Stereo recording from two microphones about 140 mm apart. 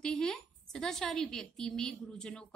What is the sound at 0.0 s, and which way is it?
A woman's voice, 5° left (ahead or behind).